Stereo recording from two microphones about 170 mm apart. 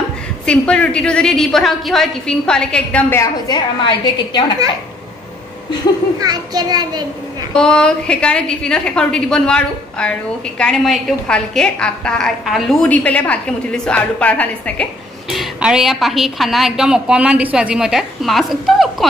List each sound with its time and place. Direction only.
0.5 s a woman's voice: 5° left (ahead or behind)
3.4 s a woman's voice: 25° left (ahead or behind)
6.1 s a child's voice: 25° right (ahead or behind)
7.5 s a woman's voice: 5° left (ahead or behind)